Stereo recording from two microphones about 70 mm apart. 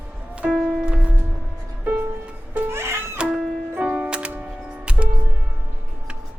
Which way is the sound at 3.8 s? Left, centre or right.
Centre.